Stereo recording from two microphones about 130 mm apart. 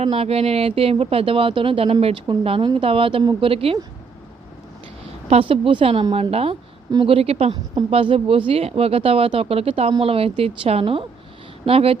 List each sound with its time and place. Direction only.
0.0 s speech: 50° right (ahead or behind)
5.3 s speech: 45° right (ahead or behind)